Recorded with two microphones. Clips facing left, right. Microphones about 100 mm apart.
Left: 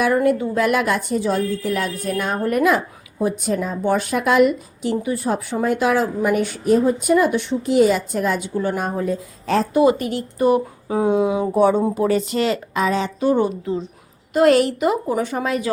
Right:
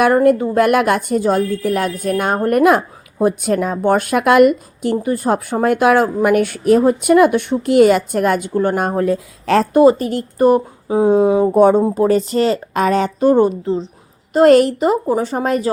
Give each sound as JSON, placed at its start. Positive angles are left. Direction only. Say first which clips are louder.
{"t": 0.0, "sound": "a woman's voice", "louder": "right 5 dB", "side_deg": -50}
{"t": 9.8, "sound": "speech", "louder": "right 5 dB", "side_deg": -40}
{"t": 10.8, "sound": "speech", "louder": "right 6 dB", "side_deg": -25}
{"t": 11.1, "sound": "a woman's voice", "louder": "right 7 dB", "side_deg": -40}
{"t": 12.7, "sound": "a woman's voice", "louder": "right 5 dB", "side_deg": -55}